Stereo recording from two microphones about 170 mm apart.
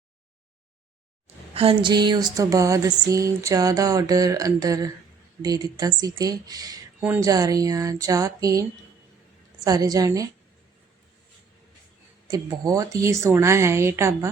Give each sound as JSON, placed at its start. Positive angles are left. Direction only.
{"t": 1.5, "sound": "speech", "side_deg": -30}
{"t": 9.6, "sound": "speech", "side_deg": -20}
{"t": 12.3, "sound": "a woman's voice", "side_deg": -20}